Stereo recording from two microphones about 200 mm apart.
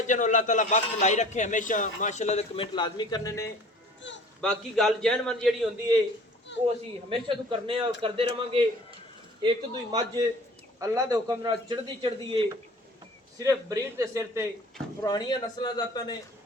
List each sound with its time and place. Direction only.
0.1 s a man's voice: 40° left (ahead or behind)
2.7 s a man's voice: 20° left (ahead or behind)
4.0 s a sound: 65° left (ahead or behind)
4.4 s a man's voice: centre (ahead or behind)
6.5 s speech: 65° left (ahead or behind)
7.1 s a man's voice: 25° right (ahead or behind)
9.4 s a man's voice: 20° right (ahead or behind)
13.4 s a man's voice: 15° right (ahead or behind)
15.0 s a man's voice: 20° left (ahead or behind)